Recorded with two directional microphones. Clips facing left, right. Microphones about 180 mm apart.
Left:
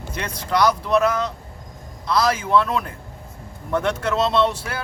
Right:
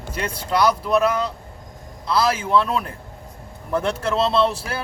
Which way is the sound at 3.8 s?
30° right (ahead or behind).